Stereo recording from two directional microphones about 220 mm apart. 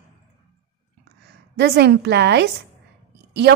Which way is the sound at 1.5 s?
50° right (ahead or behind).